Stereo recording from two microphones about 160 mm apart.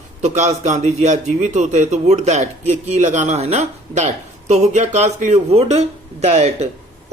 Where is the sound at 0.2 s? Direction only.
50° right (ahead or behind).